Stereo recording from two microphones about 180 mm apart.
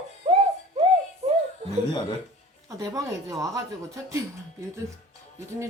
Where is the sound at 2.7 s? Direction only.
20° right (ahead or behind).